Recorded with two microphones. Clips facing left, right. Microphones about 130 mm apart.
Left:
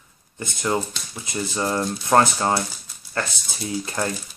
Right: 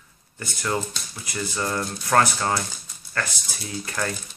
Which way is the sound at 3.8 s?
25° left (ahead or behind).